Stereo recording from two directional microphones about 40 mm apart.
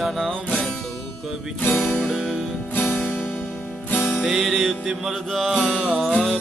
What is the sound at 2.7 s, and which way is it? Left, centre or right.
Music, left.